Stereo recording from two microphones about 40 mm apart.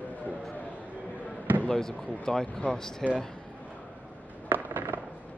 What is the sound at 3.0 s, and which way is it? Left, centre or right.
Speech, centre.